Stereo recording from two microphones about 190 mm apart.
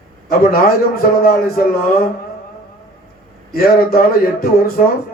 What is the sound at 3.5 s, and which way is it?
A man's voice, 55° left (ahead or behind).